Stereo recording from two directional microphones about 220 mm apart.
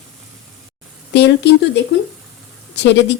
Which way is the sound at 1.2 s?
50° left (ahead or behind).